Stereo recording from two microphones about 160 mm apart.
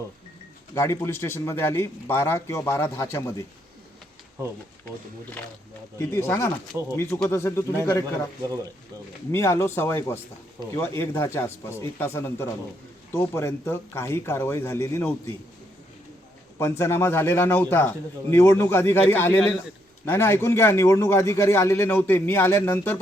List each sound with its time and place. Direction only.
0.7 s a man's voice: 15° left (ahead or behind)
6.0 s a man's voice: 15° left (ahead or behind)
9.3 s a man's voice: 15° left (ahead or behind)
16.6 s a man's voice: 15° left (ahead or behind)